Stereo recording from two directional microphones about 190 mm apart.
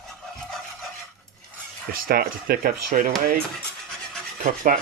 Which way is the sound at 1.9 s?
50° right (ahead or behind).